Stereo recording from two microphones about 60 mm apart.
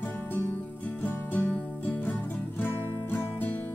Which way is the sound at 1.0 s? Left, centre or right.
Left.